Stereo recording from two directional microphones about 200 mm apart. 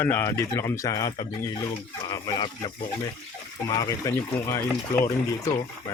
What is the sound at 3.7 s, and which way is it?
Speech, 15° left (ahead or behind).